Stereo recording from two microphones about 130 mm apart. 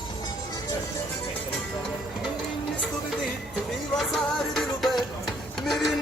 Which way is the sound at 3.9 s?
Centre (ahead or behind).